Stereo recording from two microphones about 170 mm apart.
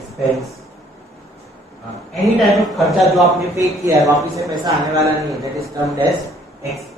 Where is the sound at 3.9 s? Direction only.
20° right (ahead or behind).